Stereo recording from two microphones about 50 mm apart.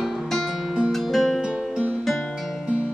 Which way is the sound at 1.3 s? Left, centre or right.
Centre.